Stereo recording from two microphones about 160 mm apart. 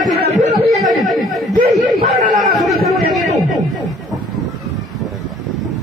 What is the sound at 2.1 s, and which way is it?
Speech, 40° right (ahead or behind).